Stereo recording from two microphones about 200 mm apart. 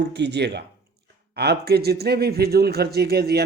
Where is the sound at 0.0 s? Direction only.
60° right (ahead or behind).